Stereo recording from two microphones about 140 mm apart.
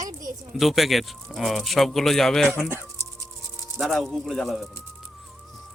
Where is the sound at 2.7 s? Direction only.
15° right (ahead or behind).